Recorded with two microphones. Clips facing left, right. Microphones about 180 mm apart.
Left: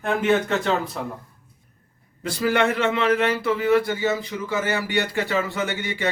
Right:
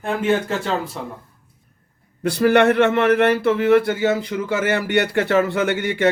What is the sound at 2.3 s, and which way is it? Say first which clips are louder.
Speech: right 6 dB; 65° right (ahead or behind).